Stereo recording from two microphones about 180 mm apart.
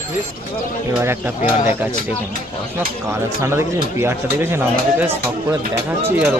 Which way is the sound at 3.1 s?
15° right (ahead or behind).